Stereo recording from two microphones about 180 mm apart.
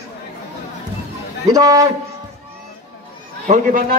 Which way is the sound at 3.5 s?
50° right (ahead or behind).